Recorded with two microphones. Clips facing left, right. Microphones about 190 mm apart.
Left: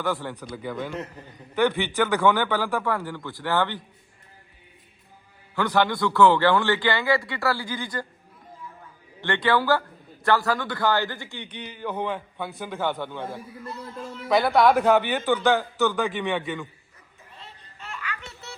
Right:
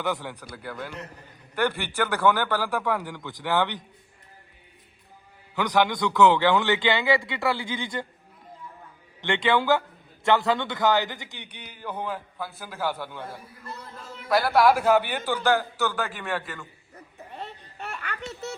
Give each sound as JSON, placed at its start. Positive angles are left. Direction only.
{"t": 0.0, "sound": "a man's voice", "side_deg": -15}
{"t": 5.5, "sound": "a man's voice", "side_deg": -15}
{"t": 9.2, "sound": "a man's voice", "side_deg": -20}
{"t": 14.3, "sound": "a man's voice", "side_deg": 0}
{"t": 16.9, "sound": "babbling", "side_deg": -65}